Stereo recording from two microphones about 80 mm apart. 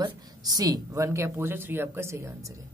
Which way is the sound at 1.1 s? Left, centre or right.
Right.